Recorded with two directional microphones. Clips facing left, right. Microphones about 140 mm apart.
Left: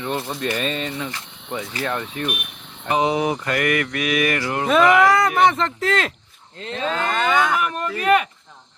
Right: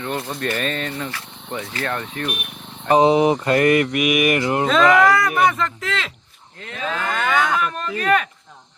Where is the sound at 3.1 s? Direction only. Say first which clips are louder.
Right 6 dB; 25° right (ahead or behind).